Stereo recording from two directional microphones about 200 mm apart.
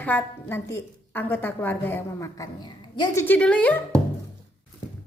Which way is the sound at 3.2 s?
5° left (ahead or behind).